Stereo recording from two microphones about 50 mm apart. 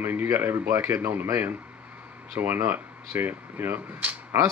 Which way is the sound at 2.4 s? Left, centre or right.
Right.